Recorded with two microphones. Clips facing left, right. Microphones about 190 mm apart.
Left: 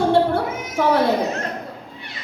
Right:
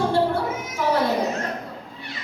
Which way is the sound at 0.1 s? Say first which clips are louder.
Left 4 dB; 60° left (ahead or behind).